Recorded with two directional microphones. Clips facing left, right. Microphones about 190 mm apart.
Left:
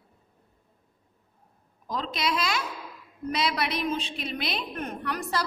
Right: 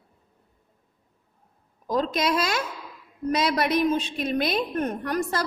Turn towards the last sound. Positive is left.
turn(degrees=-45)  # may be behind; listen again after turning